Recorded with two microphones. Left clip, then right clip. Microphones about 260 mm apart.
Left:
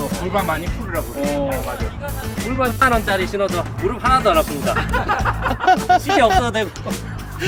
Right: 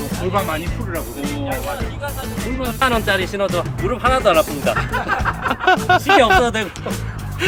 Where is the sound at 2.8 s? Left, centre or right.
Centre.